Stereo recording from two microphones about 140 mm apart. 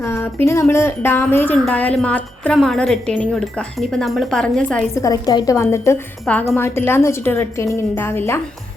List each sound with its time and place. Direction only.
0.0 s a woman's voice: 15° left (ahead or behind)
4.9 s a woman's voice: 25° left (ahead or behind)
6.3 s a woman's voice: 10° left (ahead or behind)